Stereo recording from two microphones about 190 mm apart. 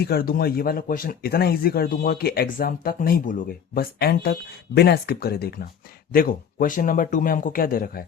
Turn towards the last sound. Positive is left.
turn(degrees=50)  # may be behind; listen again after turning